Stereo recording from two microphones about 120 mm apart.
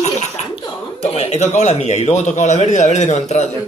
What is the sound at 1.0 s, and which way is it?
A man's voice, 60° left (ahead or behind).